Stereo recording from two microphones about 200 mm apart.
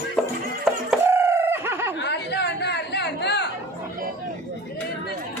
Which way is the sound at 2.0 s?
55° left (ahead or behind).